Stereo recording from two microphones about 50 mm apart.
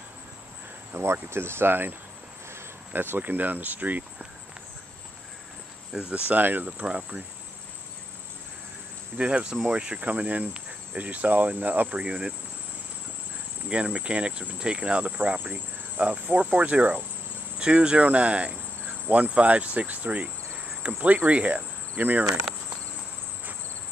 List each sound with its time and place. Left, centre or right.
0.9 s speech: right
2.9 s cricket: right
6.0 s cricket: right
6.8 s cricket: right
9.1 s cricket: right
12.0 s speech: centre
13.7 s cricket: right